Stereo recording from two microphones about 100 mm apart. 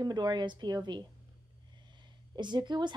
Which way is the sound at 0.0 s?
45° right (ahead or behind).